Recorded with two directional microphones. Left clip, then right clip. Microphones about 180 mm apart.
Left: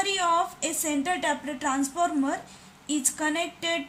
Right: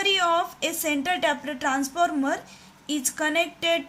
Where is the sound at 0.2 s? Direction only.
50° right (ahead or behind).